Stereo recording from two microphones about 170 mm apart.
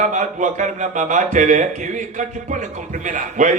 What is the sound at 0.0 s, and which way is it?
A man's voice, 45° right (ahead or behind).